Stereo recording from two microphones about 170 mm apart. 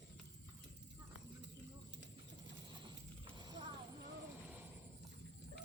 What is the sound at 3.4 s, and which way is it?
Horse, 25° right (ahead or behind).